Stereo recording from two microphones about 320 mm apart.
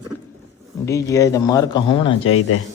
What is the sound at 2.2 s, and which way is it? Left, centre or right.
Speech, left.